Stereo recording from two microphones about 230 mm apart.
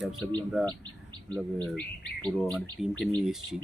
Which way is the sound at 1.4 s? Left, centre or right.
Centre.